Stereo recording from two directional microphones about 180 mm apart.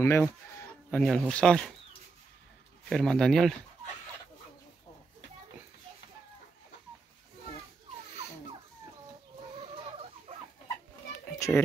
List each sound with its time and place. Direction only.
0.0 s speech: 15° left (ahead or behind)
0.8 s speech: 5° left (ahead or behind)
2.9 s speech: 5° left (ahead or behind)
11.3 s children playing: 15° left (ahead or behind)